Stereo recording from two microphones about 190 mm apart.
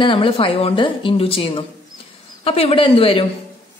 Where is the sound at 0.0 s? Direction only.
25° left (ahead or behind).